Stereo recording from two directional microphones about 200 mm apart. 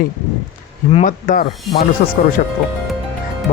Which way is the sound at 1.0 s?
45° left (ahead or behind).